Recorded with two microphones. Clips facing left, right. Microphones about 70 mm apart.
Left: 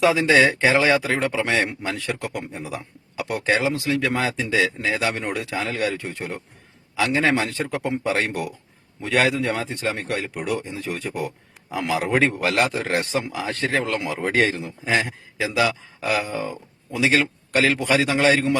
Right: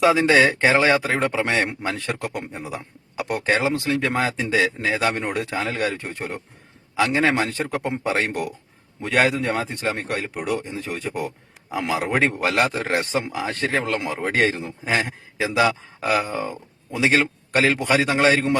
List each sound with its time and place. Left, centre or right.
0.0 s a man's voice: right